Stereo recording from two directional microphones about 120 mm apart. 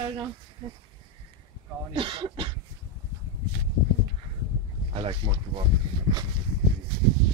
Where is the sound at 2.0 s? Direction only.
45° right (ahead or behind).